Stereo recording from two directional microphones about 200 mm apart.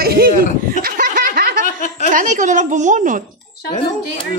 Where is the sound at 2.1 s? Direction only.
40° right (ahead or behind).